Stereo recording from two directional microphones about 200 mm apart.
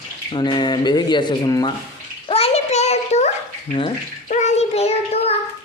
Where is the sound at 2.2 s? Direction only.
30° left (ahead or behind).